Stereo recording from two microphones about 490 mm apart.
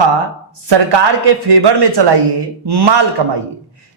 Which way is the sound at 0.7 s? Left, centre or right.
Right.